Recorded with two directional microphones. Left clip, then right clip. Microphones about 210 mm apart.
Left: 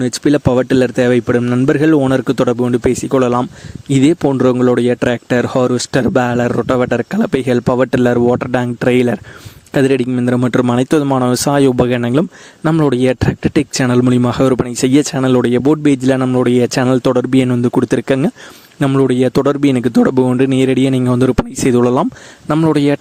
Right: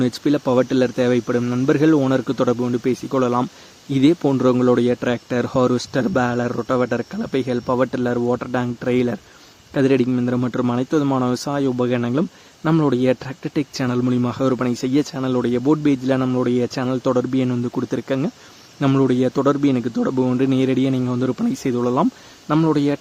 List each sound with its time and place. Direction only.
0.0 s speech: 35° left (ahead or behind)